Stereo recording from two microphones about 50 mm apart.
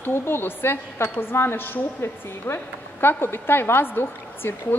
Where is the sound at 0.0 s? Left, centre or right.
Left.